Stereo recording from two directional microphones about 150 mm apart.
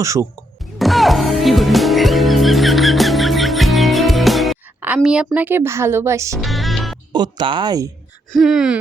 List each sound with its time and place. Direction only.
0.0 s speech: 20° right (ahead or behind)
0.6 s music: centre (ahead or behind)
5.0 s speech: 5° right (ahead or behind)
6.4 s music: centre (ahead or behind)
7.1 s speech: 30° right (ahead or behind)
8.3 s speech: centre (ahead or behind)